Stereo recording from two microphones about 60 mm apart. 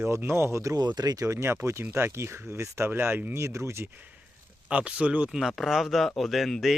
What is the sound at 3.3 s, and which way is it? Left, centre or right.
Speech, right.